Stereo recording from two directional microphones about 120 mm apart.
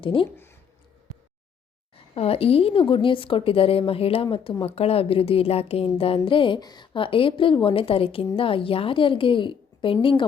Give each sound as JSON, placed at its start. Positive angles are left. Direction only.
{"t": 0.0, "sound": "a woman's voice", "side_deg": 45}
{"t": 2.1, "sound": "a woman's voice", "side_deg": 55}